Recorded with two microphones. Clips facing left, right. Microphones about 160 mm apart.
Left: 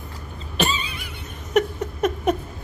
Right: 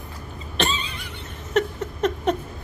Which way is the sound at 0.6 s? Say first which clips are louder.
Left 1 dB; 10° left (ahead or behind).